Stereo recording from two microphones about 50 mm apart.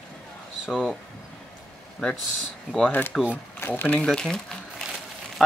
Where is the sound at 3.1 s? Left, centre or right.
Centre.